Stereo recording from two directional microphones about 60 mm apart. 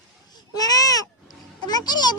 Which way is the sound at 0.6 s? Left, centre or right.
Left.